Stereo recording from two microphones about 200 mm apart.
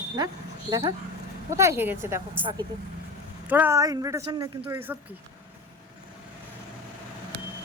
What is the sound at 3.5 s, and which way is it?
Speech, 10° right (ahead or behind).